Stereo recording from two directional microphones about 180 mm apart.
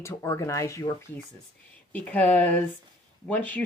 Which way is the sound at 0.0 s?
15° left (ahead or behind).